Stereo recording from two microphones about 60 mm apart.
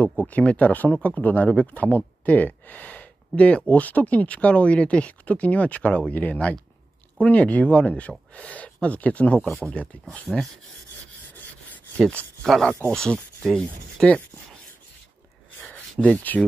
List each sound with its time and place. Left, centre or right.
0.2 s speech: left
10.3 s speech: centre
12.9 s speech: centre
15.6 s a sound: left